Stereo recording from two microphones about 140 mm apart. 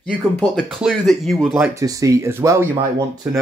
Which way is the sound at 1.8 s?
25° right (ahead or behind).